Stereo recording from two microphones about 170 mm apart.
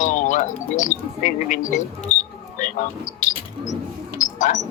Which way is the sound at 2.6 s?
50° left (ahead or behind).